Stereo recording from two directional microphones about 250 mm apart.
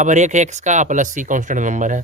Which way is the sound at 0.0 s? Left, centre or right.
Right.